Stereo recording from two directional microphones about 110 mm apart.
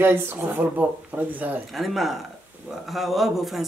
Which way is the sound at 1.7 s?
Centre (ahead or behind).